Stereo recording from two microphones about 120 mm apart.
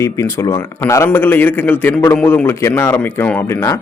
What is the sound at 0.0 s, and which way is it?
A man's voice, 25° left (ahead or behind).